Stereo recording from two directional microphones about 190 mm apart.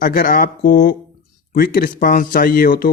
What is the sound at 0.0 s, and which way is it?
Speech, 45° left (ahead or behind).